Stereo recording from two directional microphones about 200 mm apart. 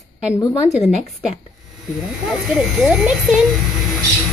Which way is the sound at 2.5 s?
5° right (ahead or behind).